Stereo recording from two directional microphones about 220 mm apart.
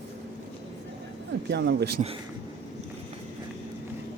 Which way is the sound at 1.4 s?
50° right (ahead or behind).